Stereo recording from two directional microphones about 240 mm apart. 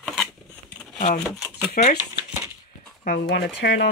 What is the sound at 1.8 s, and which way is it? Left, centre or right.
Speech, left.